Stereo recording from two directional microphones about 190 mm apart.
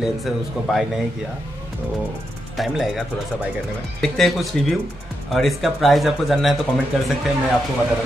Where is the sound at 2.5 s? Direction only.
Centre (ahead or behind).